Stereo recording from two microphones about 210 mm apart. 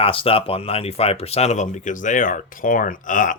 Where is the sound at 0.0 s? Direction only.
25° left (ahead or behind).